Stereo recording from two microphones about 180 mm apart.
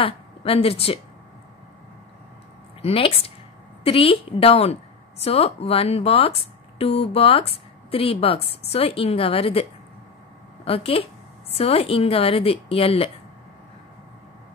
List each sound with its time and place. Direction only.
0.0 s a woman's voice: 30° left (ahead or behind)
2.8 s speech: 30° left (ahead or behind)